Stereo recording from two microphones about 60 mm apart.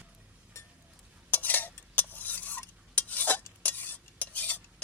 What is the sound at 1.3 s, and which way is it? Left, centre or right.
Stir, left.